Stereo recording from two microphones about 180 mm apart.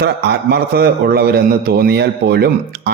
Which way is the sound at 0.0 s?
65° right (ahead or behind).